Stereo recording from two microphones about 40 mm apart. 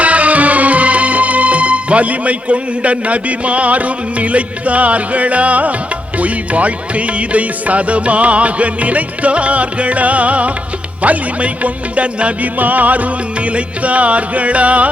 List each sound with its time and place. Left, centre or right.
0.0 s music: right
12.5 s music: right